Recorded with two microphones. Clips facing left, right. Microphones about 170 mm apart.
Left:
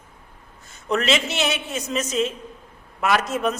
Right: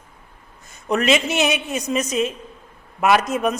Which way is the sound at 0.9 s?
15° right (ahead or behind).